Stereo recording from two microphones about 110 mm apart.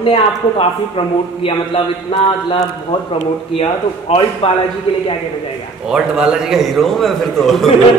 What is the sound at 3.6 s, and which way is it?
Speech, 60° left (ahead or behind).